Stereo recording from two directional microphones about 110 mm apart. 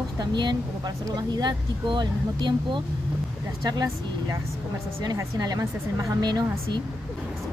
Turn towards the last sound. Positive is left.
turn(degrees=-40)  # may be behind; listen again after turning